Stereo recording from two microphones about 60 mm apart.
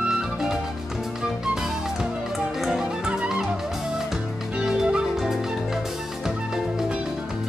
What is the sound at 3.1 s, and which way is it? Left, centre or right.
Music, centre.